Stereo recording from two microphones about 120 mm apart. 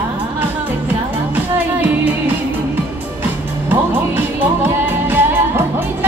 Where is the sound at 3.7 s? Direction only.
15° right (ahead or behind).